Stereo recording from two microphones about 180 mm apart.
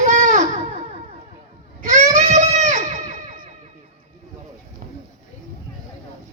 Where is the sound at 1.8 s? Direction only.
40° right (ahead or behind).